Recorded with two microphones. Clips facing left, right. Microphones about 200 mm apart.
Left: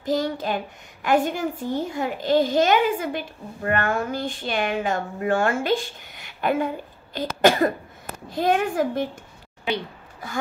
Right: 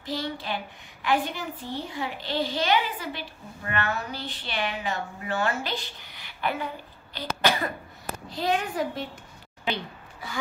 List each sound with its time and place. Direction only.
0.0 s a child's voice: 45° left (ahead or behind)